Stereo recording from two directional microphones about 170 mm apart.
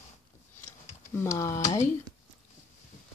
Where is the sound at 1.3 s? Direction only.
15° left (ahead or behind).